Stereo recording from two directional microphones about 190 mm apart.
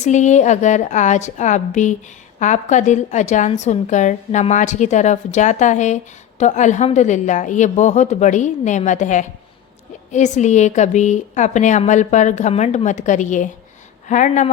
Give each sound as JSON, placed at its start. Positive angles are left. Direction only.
{"t": 0.0, "sound": "a woman's voice", "side_deg": 40}